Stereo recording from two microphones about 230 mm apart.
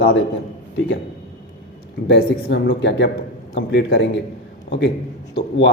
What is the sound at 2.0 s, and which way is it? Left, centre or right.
A man's voice, left.